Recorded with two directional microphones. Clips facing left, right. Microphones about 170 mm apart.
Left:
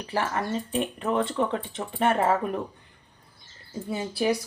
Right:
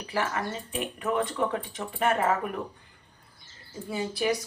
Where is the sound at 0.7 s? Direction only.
30° left (ahead or behind).